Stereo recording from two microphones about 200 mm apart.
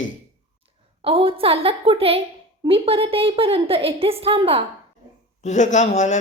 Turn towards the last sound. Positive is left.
turn(degrees=35)  # may be behind; listen again after turning